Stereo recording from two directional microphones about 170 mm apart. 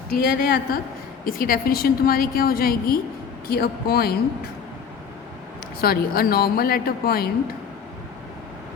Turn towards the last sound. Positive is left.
turn(degrees=60)  # may be behind; listen again after turning